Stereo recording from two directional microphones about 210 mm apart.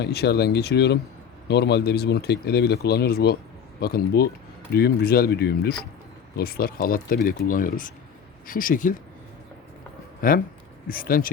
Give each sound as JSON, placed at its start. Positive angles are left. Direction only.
{"t": 0.0, "sound": "speech", "side_deg": 50}
{"t": 10.2, "sound": "speech", "side_deg": 45}